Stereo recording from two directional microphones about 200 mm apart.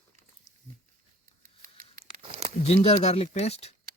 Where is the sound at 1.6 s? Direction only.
40° right (ahead or behind).